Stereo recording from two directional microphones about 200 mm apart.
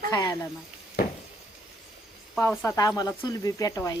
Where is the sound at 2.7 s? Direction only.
20° left (ahead or behind).